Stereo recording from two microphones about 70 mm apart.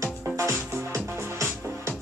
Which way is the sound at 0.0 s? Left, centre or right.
Right.